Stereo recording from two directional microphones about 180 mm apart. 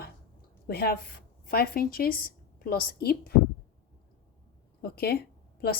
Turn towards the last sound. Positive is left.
turn(degrees=60)  # may be behind; listen again after turning